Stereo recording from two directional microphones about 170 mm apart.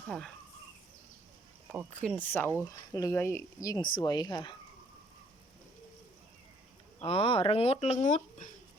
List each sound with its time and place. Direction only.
2.0 s speech: 10° left (ahead or behind)
7.0 s speech: 35° left (ahead or behind)